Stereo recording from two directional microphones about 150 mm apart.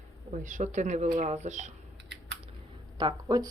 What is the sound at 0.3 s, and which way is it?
Speech, 55° right (ahead or behind).